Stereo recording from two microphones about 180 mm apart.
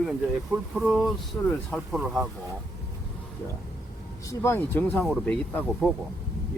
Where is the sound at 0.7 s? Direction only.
Centre (ahead or behind).